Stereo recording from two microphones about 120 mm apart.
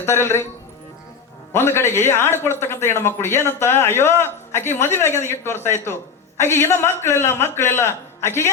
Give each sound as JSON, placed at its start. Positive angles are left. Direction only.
{"t": 0.0, "sound": "a man's voice", "side_deg": 20}
{"t": 1.5, "sound": "a man's voice", "side_deg": 20}